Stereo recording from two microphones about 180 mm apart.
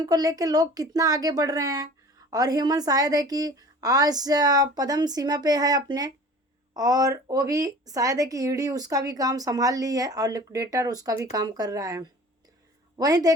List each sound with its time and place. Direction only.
0.0 s a woman's voice: 20° right (ahead or behind)